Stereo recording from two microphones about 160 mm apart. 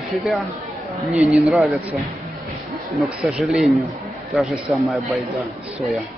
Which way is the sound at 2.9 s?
5° right (ahead or behind).